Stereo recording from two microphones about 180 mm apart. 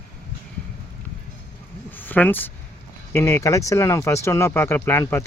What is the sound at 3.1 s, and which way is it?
Speech, 15° left (ahead or behind).